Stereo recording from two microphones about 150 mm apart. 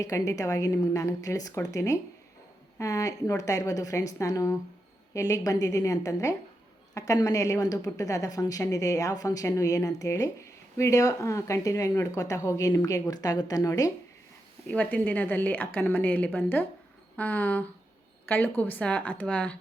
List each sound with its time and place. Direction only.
0.0 s a woman's voice: 20° left (ahead or behind)
14.7 s a woman's voice: 10° left (ahead or behind)